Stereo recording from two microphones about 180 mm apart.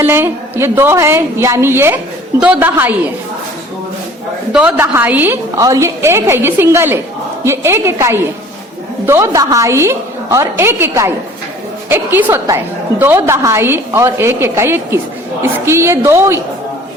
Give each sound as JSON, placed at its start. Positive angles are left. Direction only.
{"t": 0.0, "sound": "a woman's voice", "side_deg": -10}
{"t": 4.5, "sound": "a woman's voice", "side_deg": -10}